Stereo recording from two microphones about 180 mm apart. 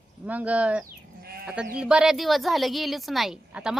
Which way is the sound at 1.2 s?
60° right (ahead or behind).